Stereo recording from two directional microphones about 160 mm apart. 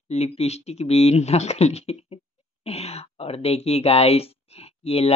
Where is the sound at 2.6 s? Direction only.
40° left (ahead or behind).